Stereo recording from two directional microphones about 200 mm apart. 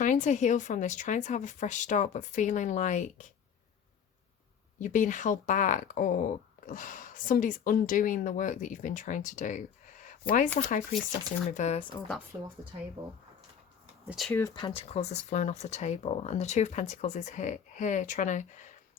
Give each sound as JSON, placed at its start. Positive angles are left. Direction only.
{"t": 0.0, "sound": "speech", "side_deg": 40}
{"t": 4.8, "sound": "speech", "side_deg": 40}
{"t": 12.3, "sound": "a woman's voice", "side_deg": -20}
{"t": 14.1, "sound": "speech", "side_deg": 0}
{"t": 14.3, "sound": "speech", "side_deg": 15}